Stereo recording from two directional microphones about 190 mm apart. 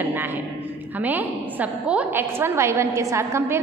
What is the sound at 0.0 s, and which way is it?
A man's voice, 10° right (ahead or behind).